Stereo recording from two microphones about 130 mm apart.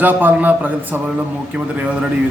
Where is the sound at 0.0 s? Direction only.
15° right (ahead or behind).